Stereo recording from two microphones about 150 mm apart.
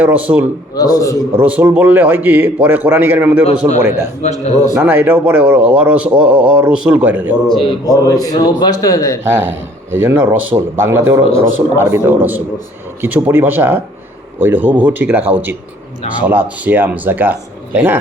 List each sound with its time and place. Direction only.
0.0 s a man's voice: 10° right (ahead or behind)
0.8 s a man's voice: 25° left (ahead or behind)
1.3 s a man's voice: 10° right (ahead or behind)
4.2 s a man's voice: 45° left (ahead or behind)
4.8 s a man's voice: 15° right (ahead or behind)
7.9 s a man's voice: 25° left (ahead or behind)
9.2 s a man's voice: 15° right (ahead or behind)